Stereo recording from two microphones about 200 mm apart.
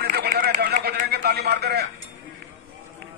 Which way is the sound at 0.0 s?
50° right (ahead or behind).